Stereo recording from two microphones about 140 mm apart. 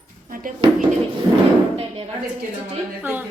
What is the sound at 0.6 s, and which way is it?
Music, 35° right (ahead or behind).